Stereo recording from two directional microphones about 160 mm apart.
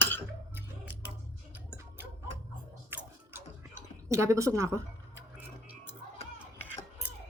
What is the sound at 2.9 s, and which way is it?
Chewing, 15° right (ahead or behind).